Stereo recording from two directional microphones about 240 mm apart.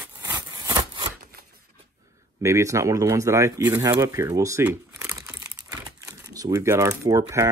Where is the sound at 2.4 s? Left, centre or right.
Centre.